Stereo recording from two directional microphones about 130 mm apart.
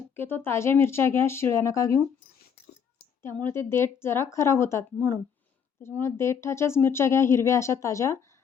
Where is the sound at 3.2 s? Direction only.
20° left (ahead or behind).